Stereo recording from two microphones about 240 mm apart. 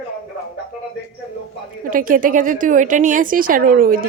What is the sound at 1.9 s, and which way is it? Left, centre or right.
A woman's voice, right.